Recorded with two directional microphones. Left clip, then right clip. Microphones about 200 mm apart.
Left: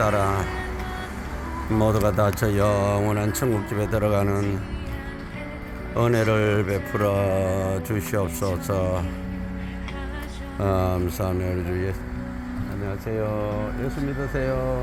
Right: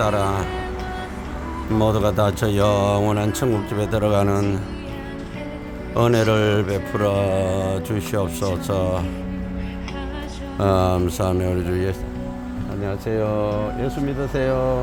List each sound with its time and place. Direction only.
0.0 s speech: centre (ahead or behind)
1.7 s mantra: 5° right (ahead or behind); by 4.6 s 20° right (ahead or behind)
5.9 s mantra: 15° right (ahead or behind)
10.6 s speech: 20° right (ahead or behind)